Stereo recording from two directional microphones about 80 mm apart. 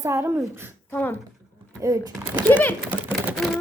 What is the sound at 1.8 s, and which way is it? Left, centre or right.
Speech, right.